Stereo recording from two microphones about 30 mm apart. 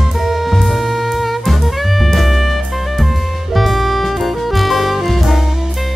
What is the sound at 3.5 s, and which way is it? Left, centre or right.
Music, centre.